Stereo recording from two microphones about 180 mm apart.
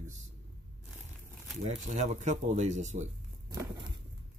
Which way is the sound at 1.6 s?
40° right (ahead or behind).